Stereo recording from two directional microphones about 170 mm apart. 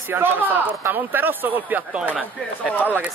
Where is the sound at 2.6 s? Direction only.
10° left (ahead or behind).